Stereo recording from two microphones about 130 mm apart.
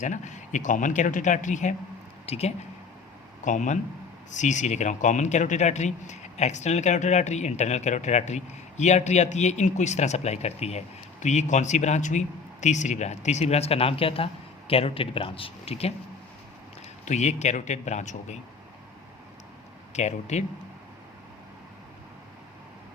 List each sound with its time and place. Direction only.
0.0 s speech: 70° left (ahead or behind)
2.2 s speech: 55° left (ahead or behind)
3.4 s speech: 70° left (ahead or behind); by 15.9 s 50° left (ahead or behind)
17.1 s speech: 60° left (ahead or behind)
19.9 s speech: 60° left (ahead or behind)